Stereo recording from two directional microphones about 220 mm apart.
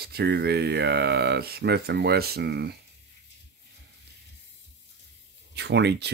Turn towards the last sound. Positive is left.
turn(degrees=-50)  # may be behind; listen again after turning